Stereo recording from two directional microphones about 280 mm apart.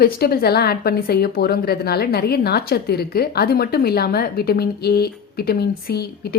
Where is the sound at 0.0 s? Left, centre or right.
Left.